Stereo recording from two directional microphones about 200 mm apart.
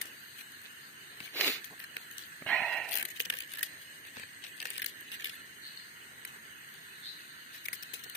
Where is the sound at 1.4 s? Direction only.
Centre (ahead or behind).